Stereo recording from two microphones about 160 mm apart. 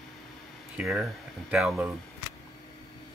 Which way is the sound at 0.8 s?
5° right (ahead or behind).